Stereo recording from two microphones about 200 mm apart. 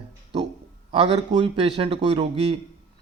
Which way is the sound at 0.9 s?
30° right (ahead or behind).